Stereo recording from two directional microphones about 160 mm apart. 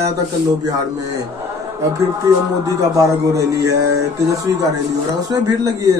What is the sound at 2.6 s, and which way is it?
A man's voice, 20° right (ahead or behind).